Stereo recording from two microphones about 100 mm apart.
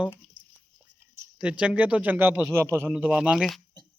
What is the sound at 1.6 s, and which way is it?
A man's voice, 10° right (ahead or behind).